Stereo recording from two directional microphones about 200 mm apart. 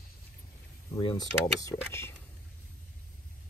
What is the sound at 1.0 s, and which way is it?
Speech, 20° left (ahead or behind).